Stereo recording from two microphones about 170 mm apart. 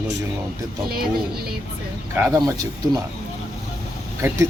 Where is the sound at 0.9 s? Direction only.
65° right (ahead or behind).